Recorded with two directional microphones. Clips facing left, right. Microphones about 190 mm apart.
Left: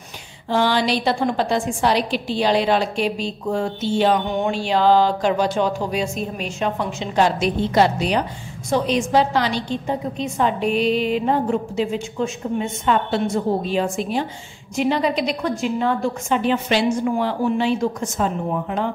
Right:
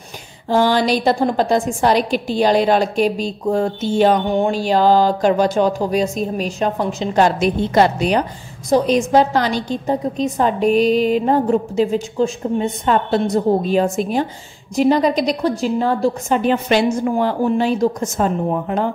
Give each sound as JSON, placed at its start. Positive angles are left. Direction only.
{"t": 0.5, "sound": "a woman's voice", "side_deg": -45}